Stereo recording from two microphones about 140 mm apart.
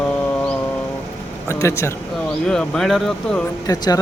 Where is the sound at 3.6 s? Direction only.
25° left (ahead or behind).